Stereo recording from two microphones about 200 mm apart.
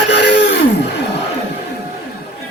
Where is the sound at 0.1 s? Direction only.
60° left (ahead or behind).